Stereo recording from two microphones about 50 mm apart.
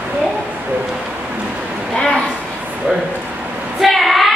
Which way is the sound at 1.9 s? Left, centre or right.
Centre.